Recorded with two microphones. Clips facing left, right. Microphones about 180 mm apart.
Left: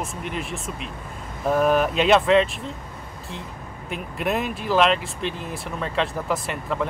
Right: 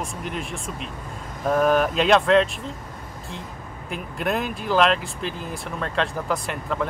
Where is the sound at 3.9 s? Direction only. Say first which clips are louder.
Even; centre (ahead or behind).